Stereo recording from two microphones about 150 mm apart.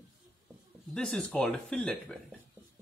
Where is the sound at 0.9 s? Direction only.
5° left (ahead or behind).